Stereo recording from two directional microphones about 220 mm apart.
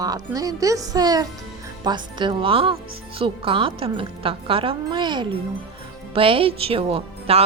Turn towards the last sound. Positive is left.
turn(degrees=-25)  # may be behind; listen again after turning